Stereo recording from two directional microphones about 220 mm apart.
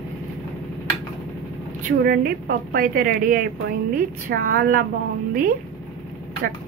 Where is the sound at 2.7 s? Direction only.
40° right (ahead or behind).